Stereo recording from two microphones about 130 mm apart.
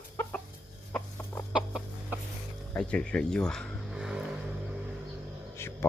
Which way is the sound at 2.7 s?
10° left (ahead or behind).